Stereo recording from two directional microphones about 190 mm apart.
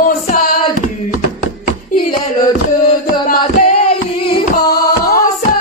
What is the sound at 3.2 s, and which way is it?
Music, 45° left (ahead or behind).